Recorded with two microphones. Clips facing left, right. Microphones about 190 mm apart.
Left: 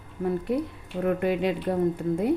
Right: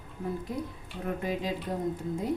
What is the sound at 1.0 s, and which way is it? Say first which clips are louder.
Speech: left 8 dB; 65° left (ahead or behind).